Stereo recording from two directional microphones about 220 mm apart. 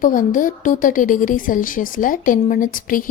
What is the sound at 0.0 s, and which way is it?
A woman's voice, 35° left (ahead or behind).